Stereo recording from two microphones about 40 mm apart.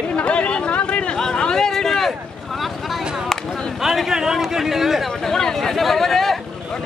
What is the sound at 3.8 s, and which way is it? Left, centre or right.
A man's voice, centre.